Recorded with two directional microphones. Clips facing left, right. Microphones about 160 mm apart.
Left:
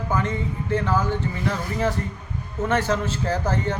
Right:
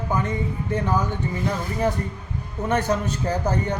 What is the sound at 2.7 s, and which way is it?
Speech, 15° right (ahead or behind).